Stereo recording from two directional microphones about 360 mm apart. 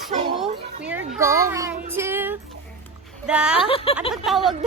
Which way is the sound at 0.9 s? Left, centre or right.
Centre.